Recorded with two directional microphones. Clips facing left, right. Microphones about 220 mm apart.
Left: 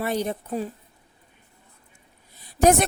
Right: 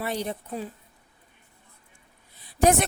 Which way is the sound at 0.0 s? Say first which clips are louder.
Left 4 dB; 50° left (ahead or behind).